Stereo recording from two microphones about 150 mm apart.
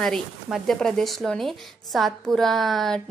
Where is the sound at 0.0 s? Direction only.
Centre (ahead or behind).